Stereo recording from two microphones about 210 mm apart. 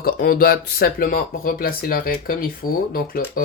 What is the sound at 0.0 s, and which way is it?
Speech, 45° left (ahead or behind).